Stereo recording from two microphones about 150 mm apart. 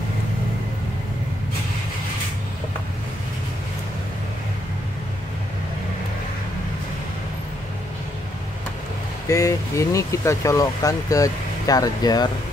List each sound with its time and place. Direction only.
9.3 s speech: 20° left (ahead or behind)